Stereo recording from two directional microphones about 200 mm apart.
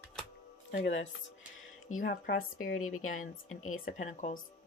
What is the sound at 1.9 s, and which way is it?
Speech, 40° left (ahead or behind).